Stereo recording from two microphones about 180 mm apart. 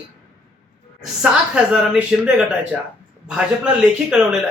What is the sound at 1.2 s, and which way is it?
A man's voice, 5° right (ahead or behind).